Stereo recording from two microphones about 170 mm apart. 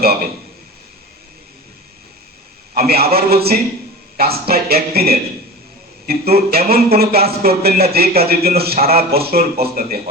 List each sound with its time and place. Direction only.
2.7 s speech: 65° right (ahead or behind)